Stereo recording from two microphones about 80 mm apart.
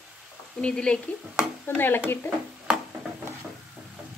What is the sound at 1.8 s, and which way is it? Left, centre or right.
Speech, left.